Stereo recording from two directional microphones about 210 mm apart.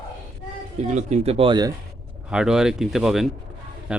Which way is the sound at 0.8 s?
35° right (ahead or behind).